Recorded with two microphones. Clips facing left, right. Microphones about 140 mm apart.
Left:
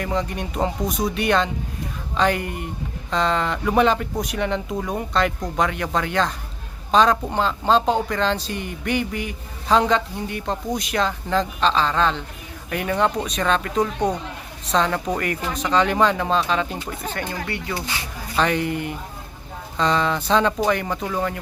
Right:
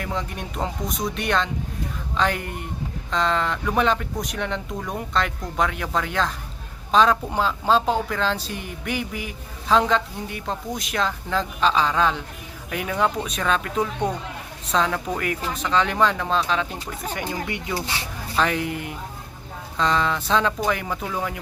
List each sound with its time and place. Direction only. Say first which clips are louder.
0.0 s speech: left 4 dB; centre (ahead or behind)
17.2 s speech: right 1 dB; 15° right (ahead or behind)
18.3 s speech: left 2 dB; centre (ahead or behind)